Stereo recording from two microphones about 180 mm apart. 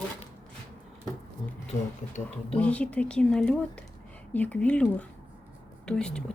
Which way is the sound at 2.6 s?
5° left (ahead or behind).